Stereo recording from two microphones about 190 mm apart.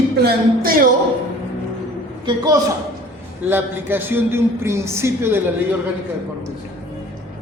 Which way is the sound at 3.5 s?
10° right (ahead or behind).